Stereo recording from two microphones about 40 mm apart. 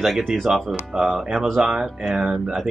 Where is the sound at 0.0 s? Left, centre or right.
Centre.